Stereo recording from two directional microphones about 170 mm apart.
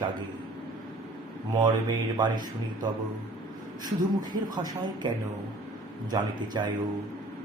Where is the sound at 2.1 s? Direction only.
25° right (ahead or behind).